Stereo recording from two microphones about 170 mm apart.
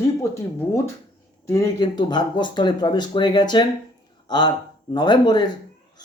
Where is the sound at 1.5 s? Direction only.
20° left (ahead or behind).